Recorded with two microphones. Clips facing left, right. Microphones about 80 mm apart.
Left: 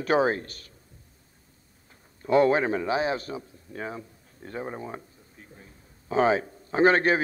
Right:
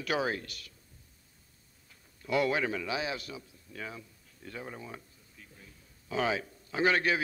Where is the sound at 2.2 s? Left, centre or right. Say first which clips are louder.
Left 8 dB; left.